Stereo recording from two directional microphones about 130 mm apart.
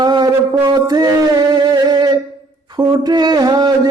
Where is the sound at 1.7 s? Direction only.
35° right (ahead or behind).